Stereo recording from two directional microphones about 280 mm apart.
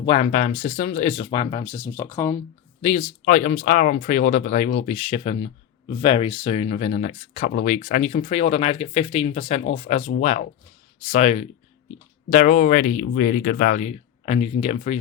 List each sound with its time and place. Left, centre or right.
0.0 s speech: centre
2.8 s speech: left